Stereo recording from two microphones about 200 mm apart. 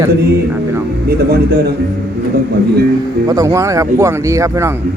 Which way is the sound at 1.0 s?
50° right (ahead or behind).